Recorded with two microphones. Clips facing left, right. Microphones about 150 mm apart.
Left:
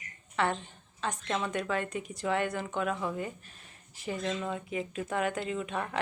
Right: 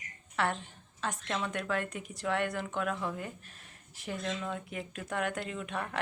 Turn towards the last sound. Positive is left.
turn(degrees=0)  # may be behind; listen again after turning